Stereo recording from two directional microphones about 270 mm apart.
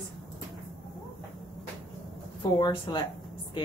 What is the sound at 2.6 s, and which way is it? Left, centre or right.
Speech, centre.